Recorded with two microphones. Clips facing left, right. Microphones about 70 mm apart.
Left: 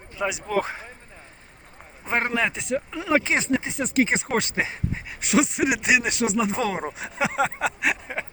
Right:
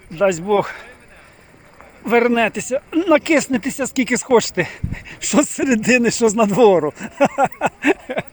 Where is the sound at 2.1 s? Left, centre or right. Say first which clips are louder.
Right 9 dB; centre.